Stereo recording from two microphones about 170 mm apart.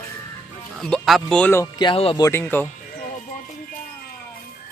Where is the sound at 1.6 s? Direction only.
25° left (ahead or behind).